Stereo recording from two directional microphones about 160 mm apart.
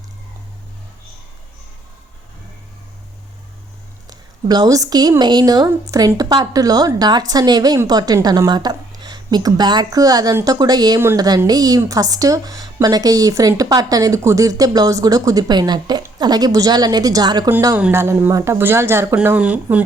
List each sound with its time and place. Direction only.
4.0 s a woman's voice: 25° right (ahead or behind)
17.7 s speech: 10° right (ahead or behind)